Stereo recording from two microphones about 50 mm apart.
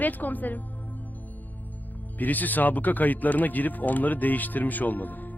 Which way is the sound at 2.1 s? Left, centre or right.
Left.